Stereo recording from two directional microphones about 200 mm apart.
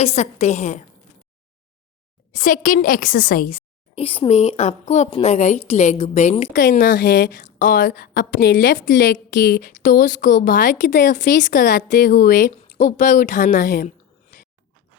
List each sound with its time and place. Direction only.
0.0 s a woman's voice: 30° left (ahead or behind)
2.3 s a woman's voice: 40° left (ahead or behind)
3.9 s a woman's voice: 30° left (ahead or behind)